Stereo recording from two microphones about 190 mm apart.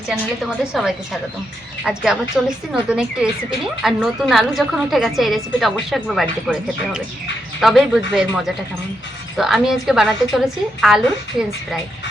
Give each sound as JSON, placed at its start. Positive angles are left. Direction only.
{"t": 0.1, "sound": "a woman's voice", "side_deg": -5}